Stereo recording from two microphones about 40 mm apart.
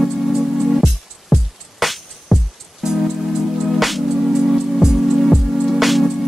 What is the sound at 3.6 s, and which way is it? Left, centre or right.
Music, centre.